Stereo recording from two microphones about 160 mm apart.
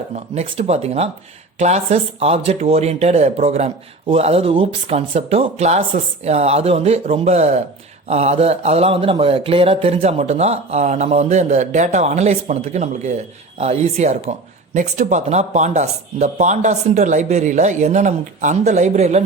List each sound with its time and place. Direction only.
0.3 s speech: 40° right (ahead or behind)